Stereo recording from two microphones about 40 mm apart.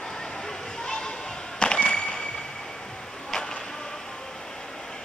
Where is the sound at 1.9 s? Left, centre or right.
Left.